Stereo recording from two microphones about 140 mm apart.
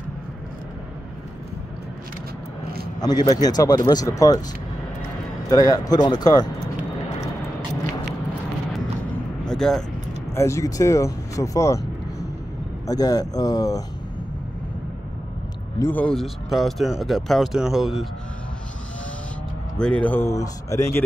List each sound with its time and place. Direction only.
3.0 s speech: 30° left (ahead or behind)
5.5 s speech: 25° left (ahead or behind)
9.5 s speech: 5° left (ahead or behind)
10.3 s speech: 20° left (ahead or behind)
15.8 s speech: 10° left (ahead or behind)
19.8 s speech: 10° left (ahead or behind)